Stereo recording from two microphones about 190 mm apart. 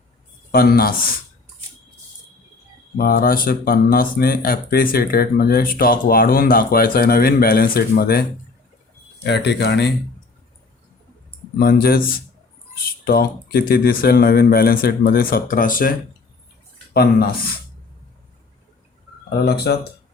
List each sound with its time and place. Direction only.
0.5 s speech: 50° left (ahead or behind)
3.0 s speech: 50° left (ahead or behind)
9.2 s speech: 65° left (ahead or behind)
11.6 s speech: 50° left (ahead or behind)
19.5 s speech: 60° left (ahead or behind)